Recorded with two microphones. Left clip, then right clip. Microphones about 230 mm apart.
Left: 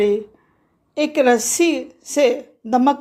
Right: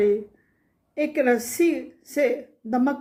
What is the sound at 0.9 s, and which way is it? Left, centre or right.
A woman's voice, centre.